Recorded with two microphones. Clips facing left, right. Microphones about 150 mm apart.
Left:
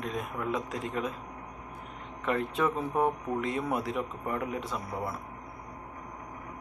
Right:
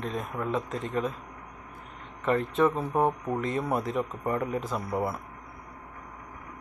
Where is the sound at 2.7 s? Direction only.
30° right (ahead or behind).